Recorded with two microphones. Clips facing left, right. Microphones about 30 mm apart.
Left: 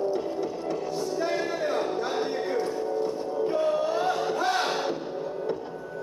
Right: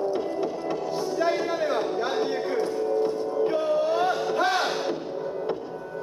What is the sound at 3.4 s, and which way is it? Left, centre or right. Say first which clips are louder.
Music: right 1 dB; right.